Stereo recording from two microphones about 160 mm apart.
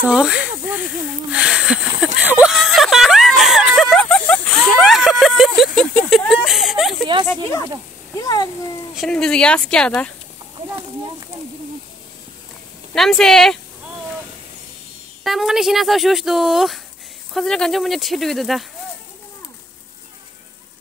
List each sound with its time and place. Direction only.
0.0 s snake: 5° right (ahead or behind)
1.3 s speech: 5° right (ahead or behind)
2.2 s a sound: 5° right (ahead or behind)
8.2 s a sound: 25° left (ahead or behind)
8.9 s speech: 5° left (ahead or behind)
12.9 s speech: centre (ahead or behind)
15.2 s speech: centre (ahead or behind)